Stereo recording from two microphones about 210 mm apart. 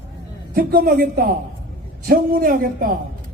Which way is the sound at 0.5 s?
45° right (ahead or behind).